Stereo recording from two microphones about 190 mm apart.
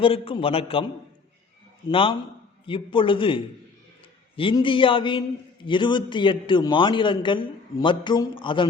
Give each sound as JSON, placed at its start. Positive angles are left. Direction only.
{"t": 0.0, "sound": "a man's voice", "side_deg": 30}
{"t": 1.9, "sound": "a man's voice", "side_deg": 30}